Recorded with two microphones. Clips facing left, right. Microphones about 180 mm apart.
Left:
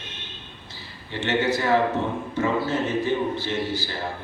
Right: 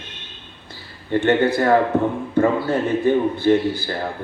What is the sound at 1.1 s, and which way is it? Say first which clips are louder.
Speech: right 7 dB; 55° right (ahead or behind).